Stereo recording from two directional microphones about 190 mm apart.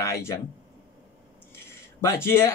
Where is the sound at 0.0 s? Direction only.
15° left (ahead or behind).